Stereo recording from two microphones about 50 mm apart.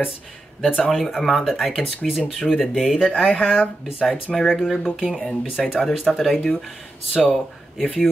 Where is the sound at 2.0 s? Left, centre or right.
Centre.